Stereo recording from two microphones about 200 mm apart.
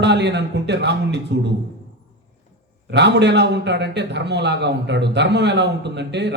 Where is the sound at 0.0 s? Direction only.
60° right (ahead or behind).